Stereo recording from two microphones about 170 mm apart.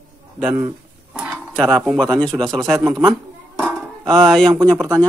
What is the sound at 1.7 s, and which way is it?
Speech, centre (ahead or behind).